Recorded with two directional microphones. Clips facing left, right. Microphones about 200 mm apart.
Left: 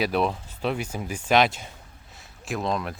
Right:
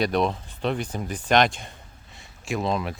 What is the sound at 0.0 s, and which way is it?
Speech, 5° left (ahead or behind).